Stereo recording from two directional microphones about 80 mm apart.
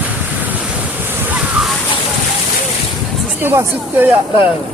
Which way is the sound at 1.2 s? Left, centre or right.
Right.